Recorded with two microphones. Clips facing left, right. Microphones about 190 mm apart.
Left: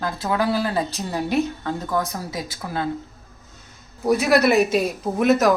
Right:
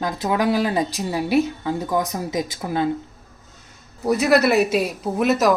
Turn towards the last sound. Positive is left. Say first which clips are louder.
# left 1 dB
turn(degrees=0)  # may be behind; listen again after turning